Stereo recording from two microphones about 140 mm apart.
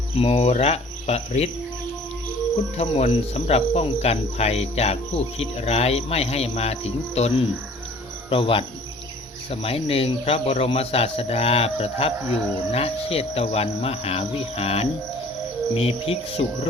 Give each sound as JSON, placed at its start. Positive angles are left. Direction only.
{"t": 0.2, "sound": "speech", "side_deg": 45}
{"t": 2.7, "sound": "speech", "side_deg": 50}
{"t": 8.3, "sound": "cricket", "side_deg": 40}
{"t": 9.5, "sound": "speech", "side_deg": 45}